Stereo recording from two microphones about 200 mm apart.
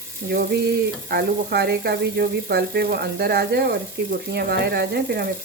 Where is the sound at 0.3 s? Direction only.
55° right (ahead or behind).